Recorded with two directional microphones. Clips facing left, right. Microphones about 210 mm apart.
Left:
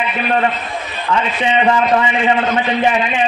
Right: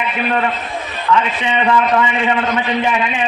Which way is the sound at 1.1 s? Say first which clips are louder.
Right 3 dB; 30° left (ahead or behind).